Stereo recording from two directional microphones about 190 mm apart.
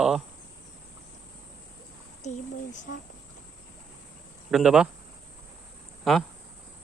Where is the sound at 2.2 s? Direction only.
35° left (ahead or behind).